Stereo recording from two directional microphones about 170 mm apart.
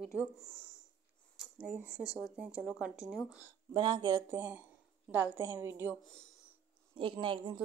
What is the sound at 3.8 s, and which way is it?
A woman's voice, 25° right (ahead or behind).